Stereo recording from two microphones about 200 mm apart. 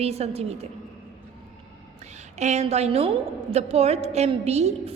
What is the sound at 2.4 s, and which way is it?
A woman's voice, 35° right (ahead or behind).